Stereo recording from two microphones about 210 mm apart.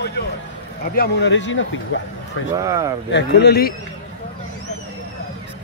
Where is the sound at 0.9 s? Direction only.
50° left (ahead or behind).